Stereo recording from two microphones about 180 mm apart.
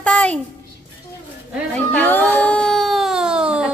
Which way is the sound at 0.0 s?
10° left (ahead or behind).